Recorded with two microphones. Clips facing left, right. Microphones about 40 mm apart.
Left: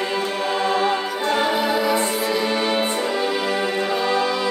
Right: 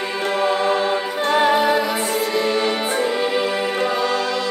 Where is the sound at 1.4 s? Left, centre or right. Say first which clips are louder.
Right 5 dB; centre.